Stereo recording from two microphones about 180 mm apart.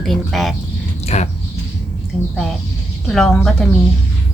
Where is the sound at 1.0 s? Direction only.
35° left (ahead or behind).